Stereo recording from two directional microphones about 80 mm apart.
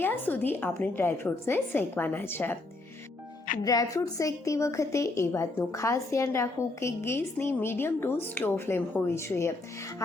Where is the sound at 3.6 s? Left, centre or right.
Left.